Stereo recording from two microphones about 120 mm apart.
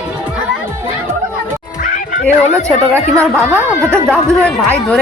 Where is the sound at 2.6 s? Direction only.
25° right (ahead or behind).